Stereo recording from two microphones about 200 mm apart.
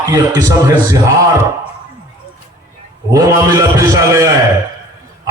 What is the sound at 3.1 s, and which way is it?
A man's voice, 15° right (ahead or behind).